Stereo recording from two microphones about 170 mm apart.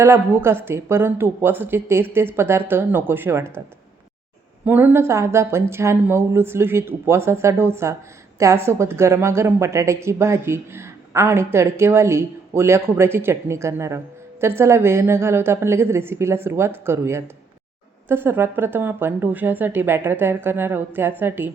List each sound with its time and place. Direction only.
0.0 s a woman's voice: 15° right (ahead or behind)
4.6 s a woman's voice: 10° right (ahead or behind)